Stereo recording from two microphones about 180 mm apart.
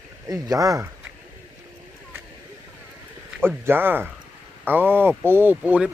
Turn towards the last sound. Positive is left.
turn(degrees=-10)  # may be behind; listen again after turning